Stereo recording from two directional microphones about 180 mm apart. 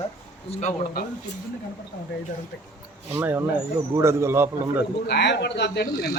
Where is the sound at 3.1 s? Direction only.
15° right (ahead or behind).